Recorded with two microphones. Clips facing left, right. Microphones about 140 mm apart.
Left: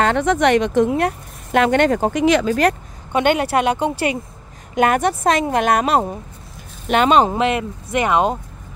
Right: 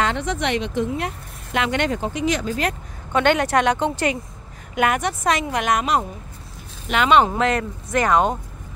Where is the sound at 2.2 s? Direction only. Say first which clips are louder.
Left 7 dB; 90° left.